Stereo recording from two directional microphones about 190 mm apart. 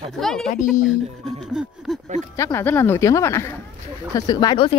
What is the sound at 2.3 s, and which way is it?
Speech, 15° left (ahead or behind).